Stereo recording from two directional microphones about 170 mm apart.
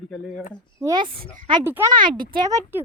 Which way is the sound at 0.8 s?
25° right (ahead or behind).